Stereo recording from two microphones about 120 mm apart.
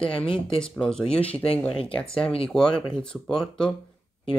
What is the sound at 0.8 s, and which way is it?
Speech, 5° left (ahead or behind).